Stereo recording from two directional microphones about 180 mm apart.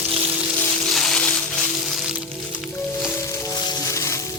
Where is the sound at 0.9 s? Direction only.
5° left (ahead or behind).